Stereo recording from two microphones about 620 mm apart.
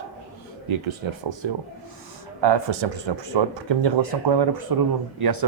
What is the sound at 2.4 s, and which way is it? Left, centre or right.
Speech, right.